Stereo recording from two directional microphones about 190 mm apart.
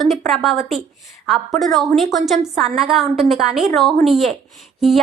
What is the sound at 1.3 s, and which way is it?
A woman's voice, centre (ahead or behind).